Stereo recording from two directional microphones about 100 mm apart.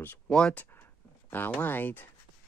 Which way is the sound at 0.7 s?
20° left (ahead or behind).